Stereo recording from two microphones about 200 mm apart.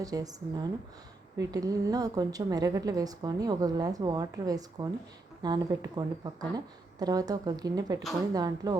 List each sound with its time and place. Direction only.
0.0 s a woman's voice: 20° right (ahead or behind)